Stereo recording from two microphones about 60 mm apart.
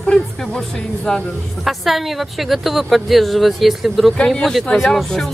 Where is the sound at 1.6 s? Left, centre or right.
Centre.